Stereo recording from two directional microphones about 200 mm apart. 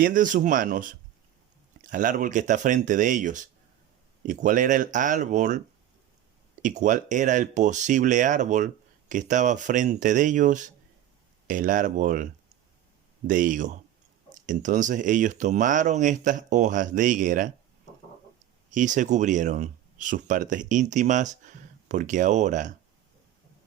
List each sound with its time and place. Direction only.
0.0 s speech: 40° right (ahead or behind)
1.9 s speech: 40° right (ahead or behind)
18.7 s speech: 40° right (ahead or behind)